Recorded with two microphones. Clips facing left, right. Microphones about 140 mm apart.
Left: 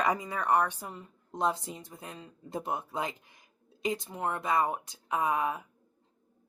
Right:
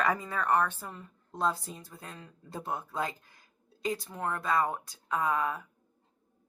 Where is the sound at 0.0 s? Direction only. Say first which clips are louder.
Even; 15° left (ahead or behind).